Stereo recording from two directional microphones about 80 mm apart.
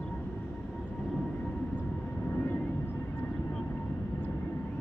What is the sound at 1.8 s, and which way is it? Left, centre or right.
Vehicle, left.